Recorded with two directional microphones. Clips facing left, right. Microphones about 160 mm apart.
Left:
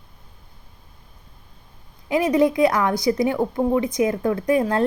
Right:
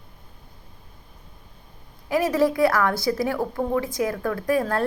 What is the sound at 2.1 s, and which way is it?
A woman's voice, 20° left (ahead or behind).